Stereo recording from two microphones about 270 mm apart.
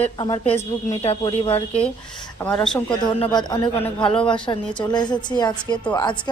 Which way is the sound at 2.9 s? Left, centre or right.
Centre.